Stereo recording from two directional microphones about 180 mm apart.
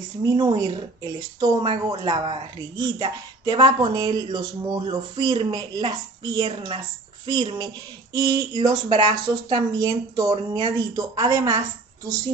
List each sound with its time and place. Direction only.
0.2 s speech: 20° right (ahead or behind)